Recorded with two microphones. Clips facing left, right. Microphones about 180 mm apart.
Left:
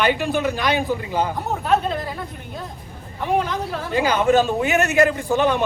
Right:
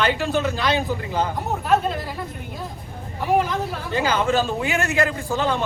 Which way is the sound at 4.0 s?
15° left (ahead or behind).